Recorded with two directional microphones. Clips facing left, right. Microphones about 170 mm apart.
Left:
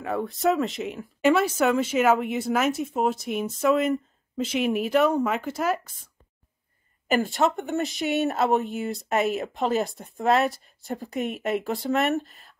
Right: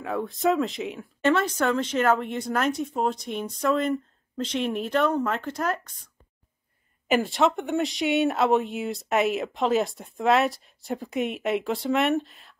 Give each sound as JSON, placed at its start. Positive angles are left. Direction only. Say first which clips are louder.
{"t": 0.0, "sound": "speech", "louder": "left 1 dB", "side_deg": 0}
{"t": 7.1, "sound": "speech", "louder": "right 1 dB", "side_deg": 0}